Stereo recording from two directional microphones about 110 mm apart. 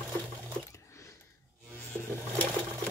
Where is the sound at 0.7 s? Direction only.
25° left (ahead or behind).